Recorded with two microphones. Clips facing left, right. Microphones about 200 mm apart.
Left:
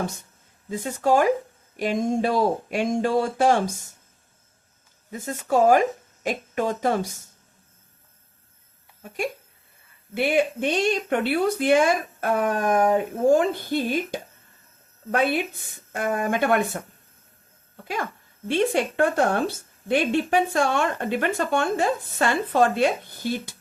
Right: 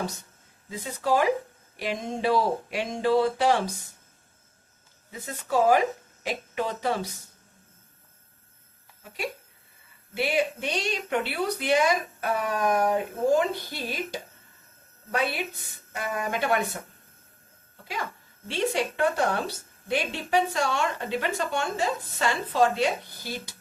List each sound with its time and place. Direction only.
0.7 s a woman's voice: 50° left (ahead or behind)
5.1 s a woman's voice: 45° left (ahead or behind)
9.0 s a woman's voice: 50° left (ahead or behind)
18.4 s a woman's voice: 55° left (ahead or behind)